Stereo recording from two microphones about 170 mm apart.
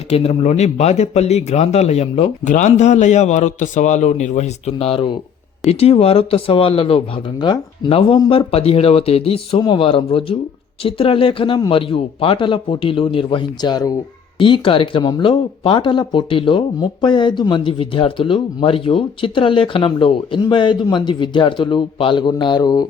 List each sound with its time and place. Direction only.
0.1 s speech: 40° left (ahead or behind)